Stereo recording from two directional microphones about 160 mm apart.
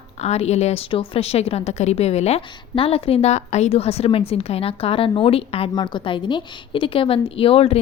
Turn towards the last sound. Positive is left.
turn(degrees=35)  # may be behind; listen again after turning